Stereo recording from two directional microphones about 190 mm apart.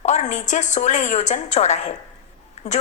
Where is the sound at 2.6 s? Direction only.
35° left (ahead or behind).